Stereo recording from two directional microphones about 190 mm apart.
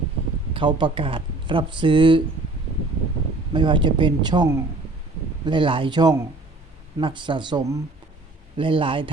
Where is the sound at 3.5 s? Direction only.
25° right (ahead or behind).